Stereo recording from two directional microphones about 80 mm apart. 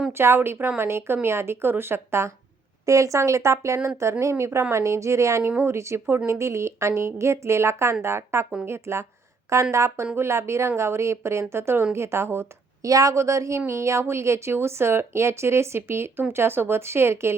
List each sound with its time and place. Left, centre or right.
0.1 s a woman's voice: right
12.8 s a woman's voice: right